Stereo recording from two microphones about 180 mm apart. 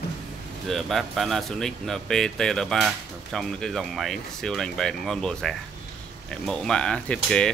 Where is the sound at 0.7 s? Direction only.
Centre (ahead or behind).